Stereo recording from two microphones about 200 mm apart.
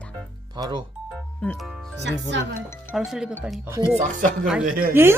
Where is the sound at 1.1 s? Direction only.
5° left (ahead or behind).